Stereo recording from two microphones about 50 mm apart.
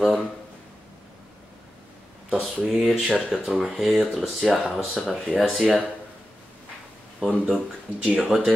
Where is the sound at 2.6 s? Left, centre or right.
Centre.